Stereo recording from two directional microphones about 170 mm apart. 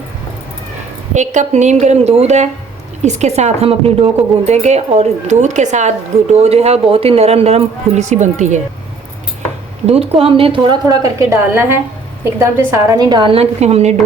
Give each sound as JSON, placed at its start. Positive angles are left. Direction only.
{"t": 1.1, "sound": "a woman's voice", "side_deg": -45}
{"t": 9.8, "sound": "a woman's voice", "side_deg": -35}